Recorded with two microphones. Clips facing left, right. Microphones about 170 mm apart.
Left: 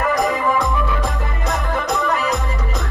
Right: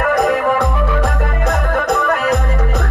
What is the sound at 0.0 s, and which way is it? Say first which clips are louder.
Music: right 4 dB; 60° right (ahead or behind).